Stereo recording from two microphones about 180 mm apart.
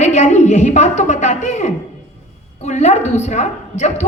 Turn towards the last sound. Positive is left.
turn(degrees=40)  # may be behind; listen again after turning